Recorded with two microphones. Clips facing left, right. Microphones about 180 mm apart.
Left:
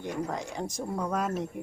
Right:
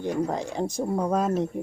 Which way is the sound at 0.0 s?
30° right (ahead or behind).